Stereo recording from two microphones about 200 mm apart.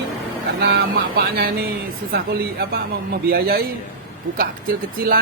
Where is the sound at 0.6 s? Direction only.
55° right (ahead or behind).